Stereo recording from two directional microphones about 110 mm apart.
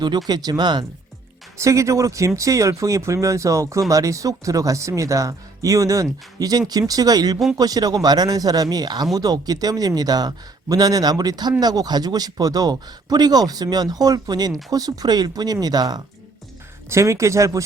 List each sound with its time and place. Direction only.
0.3 s speech: 40° right (ahead or behind)
1.5 s speech: 30° right (ahead or behind)
16.9 s speech: 25° right (ahead or behind)